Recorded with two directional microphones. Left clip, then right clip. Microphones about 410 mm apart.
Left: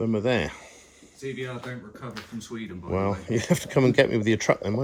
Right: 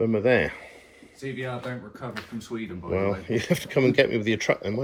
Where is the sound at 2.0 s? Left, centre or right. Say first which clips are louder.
Right 3 dB; centre.